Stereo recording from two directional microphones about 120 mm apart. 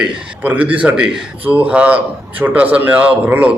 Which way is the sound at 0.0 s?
10° right (ahead or behind).